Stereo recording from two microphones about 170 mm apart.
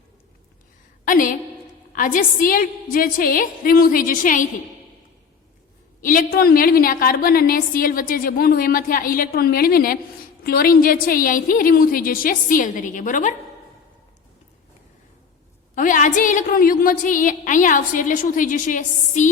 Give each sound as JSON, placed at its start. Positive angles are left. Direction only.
{"t": 1.0, "sound": "a woman's voice", "side_deg": 55}
{"t": 6.0, "sound": "a woman's voice", "side_deg": 55}
{"t": 15.7, "sound": "a woman's voice", "side_deg": 50}